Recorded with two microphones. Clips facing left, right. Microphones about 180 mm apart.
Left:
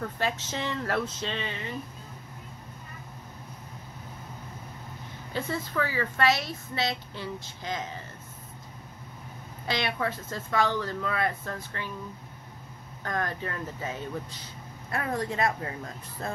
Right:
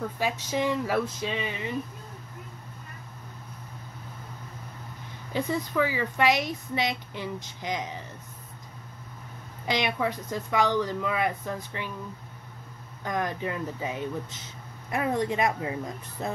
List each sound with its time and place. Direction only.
0.0 s speech: 10° right (ahead or behind)
5.3 s speech: 15° right (ahead or behind)
9.7 s speech: 15° right (ahead or behind)
13.0 s speech: 15° right (ahead or behind)